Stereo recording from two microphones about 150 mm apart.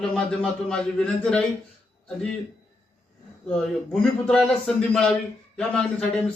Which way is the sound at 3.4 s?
10° left (ahead or behind).